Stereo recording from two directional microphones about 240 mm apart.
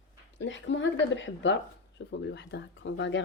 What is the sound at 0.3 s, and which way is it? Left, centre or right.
Speech, left.